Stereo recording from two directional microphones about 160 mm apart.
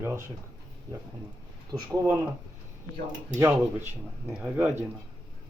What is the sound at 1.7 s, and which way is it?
Speech, 20° right (ahead or behind).